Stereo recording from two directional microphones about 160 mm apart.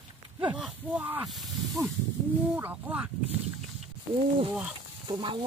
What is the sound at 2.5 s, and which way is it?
Speech, 10° right (ahead or behind).